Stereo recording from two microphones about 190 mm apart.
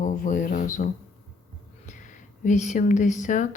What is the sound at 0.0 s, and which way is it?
Speech, 45° left (ahead or behind).